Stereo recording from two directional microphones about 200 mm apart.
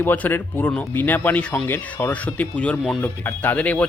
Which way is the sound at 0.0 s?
10° left (ahead or behind).